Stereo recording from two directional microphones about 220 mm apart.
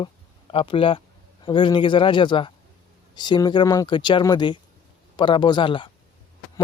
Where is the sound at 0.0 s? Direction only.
25° left (ahead or behind).